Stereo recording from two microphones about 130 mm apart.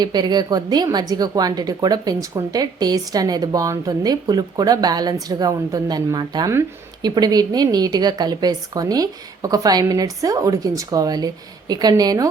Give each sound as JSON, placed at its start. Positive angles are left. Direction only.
{"t": 0.0, "sound": "a woman's voice", "side_deg": -35}